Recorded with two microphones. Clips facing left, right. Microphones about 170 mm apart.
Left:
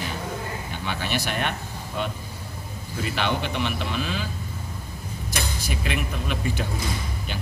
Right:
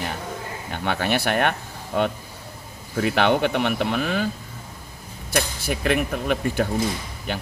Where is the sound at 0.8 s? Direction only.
55° right (ahead or behind).